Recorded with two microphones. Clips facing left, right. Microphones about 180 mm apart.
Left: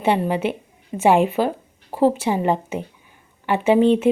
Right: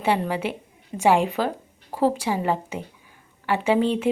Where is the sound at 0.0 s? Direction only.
25° left (ahead or behind).